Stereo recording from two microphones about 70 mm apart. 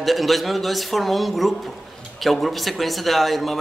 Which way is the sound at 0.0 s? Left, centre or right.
Centre.